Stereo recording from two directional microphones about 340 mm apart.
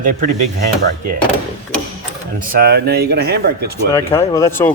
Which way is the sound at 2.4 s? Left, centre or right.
Right.